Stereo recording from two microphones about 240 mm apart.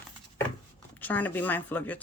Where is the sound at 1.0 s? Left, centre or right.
Centre.